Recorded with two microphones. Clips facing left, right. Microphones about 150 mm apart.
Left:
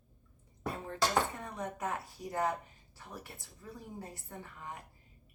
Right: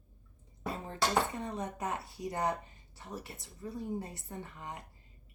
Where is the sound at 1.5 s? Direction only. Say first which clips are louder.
Right 1 dB; 20° right (ahead or behind).